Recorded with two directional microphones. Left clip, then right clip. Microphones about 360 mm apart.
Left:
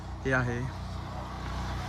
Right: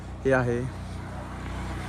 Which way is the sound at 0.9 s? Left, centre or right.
Left.